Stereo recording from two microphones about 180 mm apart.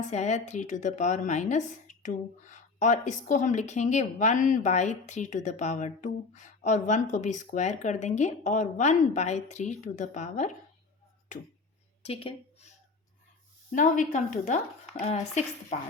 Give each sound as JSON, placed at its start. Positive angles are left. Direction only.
{"t": 0.1, "sound": "a woman's voice", "side_deg": 40}
{"t": 12.0, "sound": "a woman's voice", "side_deg": 35}
{"t": 13.7, "sound": "a woman's voice", "side_deg": 45}